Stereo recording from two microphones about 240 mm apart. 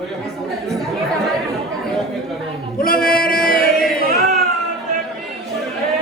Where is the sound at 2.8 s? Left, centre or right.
Left.